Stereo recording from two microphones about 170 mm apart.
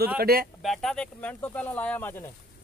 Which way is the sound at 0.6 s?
Centre (ahead or behind).